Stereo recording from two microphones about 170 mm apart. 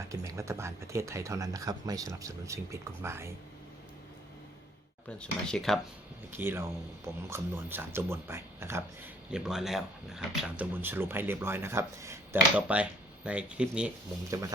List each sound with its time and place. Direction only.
0.1 s speech: 20° right (ahead or behind)
5.0 s speech: 5° left (ahead or behind)
6.3 s speech: 10° right (ahead or behind)
9.3 s speech: 5° right (ahead or behind)